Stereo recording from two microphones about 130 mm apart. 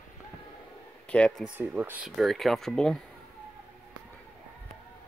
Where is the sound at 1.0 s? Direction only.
10° left (ahead or behind).